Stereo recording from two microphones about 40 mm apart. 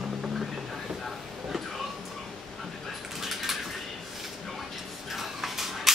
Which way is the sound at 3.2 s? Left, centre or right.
Centre.